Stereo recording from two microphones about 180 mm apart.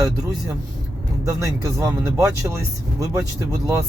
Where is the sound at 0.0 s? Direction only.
20° right (ahead or behind).